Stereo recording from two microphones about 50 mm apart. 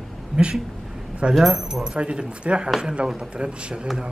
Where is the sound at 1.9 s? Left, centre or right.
Centre.